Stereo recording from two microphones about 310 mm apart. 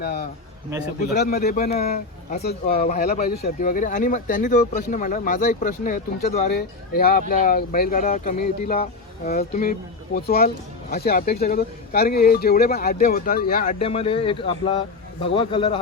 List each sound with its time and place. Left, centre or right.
0.0 s a man's voice: left